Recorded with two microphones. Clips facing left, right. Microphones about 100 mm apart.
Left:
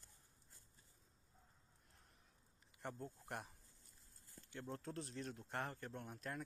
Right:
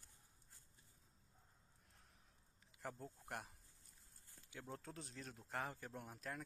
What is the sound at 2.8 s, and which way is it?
Speech, centre (ahead or behind).